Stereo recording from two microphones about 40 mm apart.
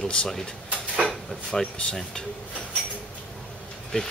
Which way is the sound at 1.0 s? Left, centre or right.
Centre.